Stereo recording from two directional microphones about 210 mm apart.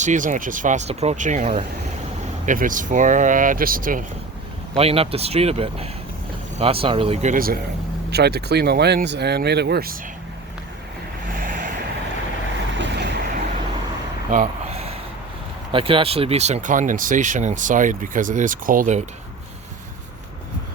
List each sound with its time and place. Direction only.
0.0 s speech: 35° right (ahead or behind)
4.8 s speech: 30° right (ahead or behind); by 10.0 s 45° right (ahead or behind)
11.3 s vehicle: 40° right (ahead or behind)
12.7 s vehicle: 55° right (ahead or behind)
14.3 s a sound: 35° right (ahead or behind)
15.7 s speech: 25° right (ahead or behind)